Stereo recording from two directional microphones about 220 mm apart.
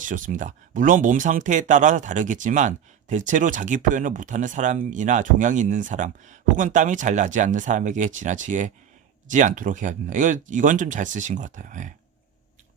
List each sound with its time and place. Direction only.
0.0 s speech: 35° right (ahead or behind)